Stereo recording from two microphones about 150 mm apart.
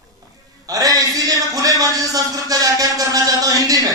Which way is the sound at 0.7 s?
25° right (ahead or behind).